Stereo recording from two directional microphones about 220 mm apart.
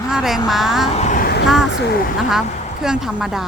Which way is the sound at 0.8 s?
30° left (ahead or behind).